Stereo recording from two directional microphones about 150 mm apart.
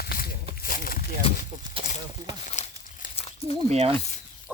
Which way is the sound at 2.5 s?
55° left (ahead or behind).